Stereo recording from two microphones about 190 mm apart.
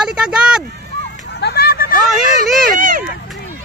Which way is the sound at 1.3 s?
60° left (ahead or behind).